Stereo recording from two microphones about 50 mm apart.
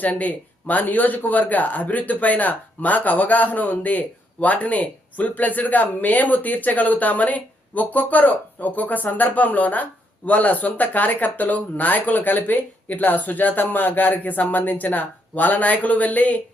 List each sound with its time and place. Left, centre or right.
0.0 s speech: left